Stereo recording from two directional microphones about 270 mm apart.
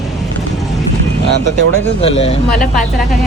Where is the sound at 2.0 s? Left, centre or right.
Left.